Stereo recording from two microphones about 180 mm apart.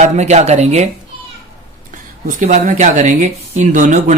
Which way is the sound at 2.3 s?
45° right (ahead or behind).